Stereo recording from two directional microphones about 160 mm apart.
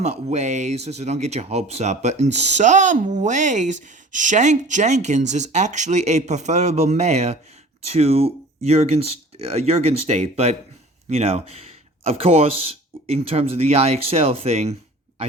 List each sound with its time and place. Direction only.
0.0 s speech: 45° right (ahead or behind)